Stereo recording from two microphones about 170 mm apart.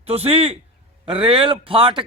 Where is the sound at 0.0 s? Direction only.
35° right (ahead or behind).